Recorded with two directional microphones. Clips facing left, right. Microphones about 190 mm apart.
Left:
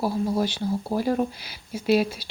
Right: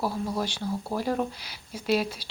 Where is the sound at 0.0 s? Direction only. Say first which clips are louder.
Left 5 dB; 25° left (ahead or behind).